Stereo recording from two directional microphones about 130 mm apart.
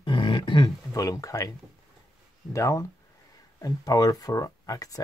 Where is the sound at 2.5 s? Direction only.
25° left (ahead or behind).